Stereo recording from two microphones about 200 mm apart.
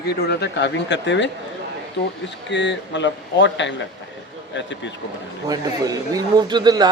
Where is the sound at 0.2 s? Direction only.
55° left (ahead or behind).